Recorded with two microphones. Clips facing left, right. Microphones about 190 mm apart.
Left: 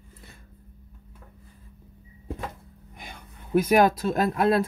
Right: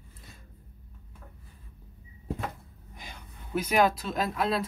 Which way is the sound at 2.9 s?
55° left (ahead or behind).